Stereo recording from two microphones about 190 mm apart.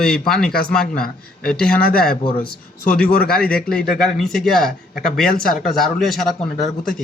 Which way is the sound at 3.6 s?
5° left (ahead or behind).